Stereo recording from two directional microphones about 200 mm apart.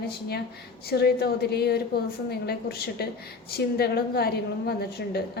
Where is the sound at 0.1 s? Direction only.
50° left (ahead or behind).